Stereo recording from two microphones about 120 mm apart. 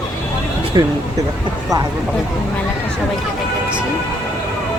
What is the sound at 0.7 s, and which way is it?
Speech, 40° right (ahead or behind).